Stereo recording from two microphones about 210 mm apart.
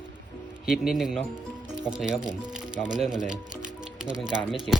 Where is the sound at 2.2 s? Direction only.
20° right (ahead or behind).